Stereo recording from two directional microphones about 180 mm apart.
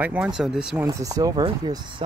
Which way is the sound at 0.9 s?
20° right (ahead or behind).